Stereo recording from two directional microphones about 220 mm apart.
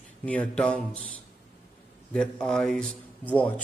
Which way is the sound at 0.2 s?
5° left (ahead or behind).